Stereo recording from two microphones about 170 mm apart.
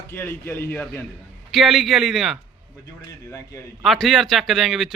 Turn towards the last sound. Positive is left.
turn(degrees=0)  # may be behind; listen again after turning